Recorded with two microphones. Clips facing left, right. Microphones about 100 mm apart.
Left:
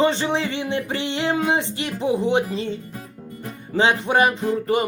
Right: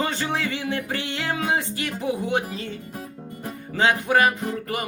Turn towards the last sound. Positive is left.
turn(degrees=25)  # may be behind; listen again after turning